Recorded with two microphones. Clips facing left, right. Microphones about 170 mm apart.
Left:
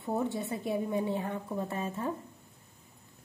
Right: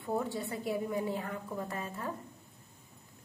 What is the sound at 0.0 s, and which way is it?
A woman's voice, 20° left (ahead or behind).